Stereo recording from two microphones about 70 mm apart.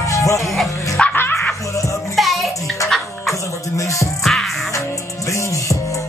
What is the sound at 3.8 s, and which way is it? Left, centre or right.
Music, left.